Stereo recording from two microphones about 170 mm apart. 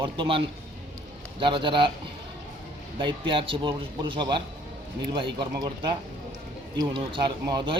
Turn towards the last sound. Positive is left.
turn(degrees=-25)  # may be behind; listen again after turning